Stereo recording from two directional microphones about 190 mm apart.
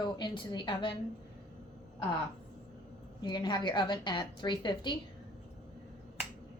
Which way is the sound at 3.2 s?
25° left (ahead or behind).